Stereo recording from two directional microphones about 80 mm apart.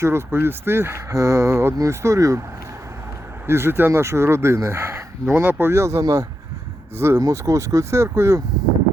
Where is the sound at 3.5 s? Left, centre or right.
Right.